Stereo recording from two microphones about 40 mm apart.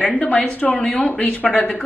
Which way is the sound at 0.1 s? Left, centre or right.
Left.